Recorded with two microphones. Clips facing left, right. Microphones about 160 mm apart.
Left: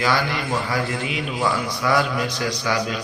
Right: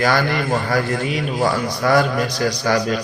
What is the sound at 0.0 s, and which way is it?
A man's voice, 45° right (ahead or behind).